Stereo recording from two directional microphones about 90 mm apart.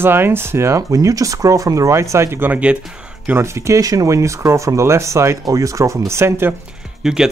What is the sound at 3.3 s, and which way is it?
Speech, 30° right (ahead or behind).